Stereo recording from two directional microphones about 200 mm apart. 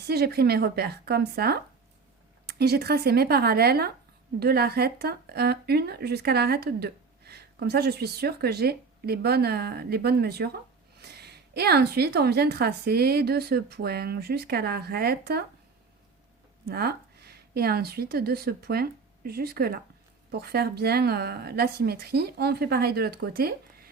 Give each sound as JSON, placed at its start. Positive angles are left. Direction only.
{"t": 0.1, "sound": "speech", "side_deg": -55}
{"t": 16.6, "sound": "speech", "side_deg": -50}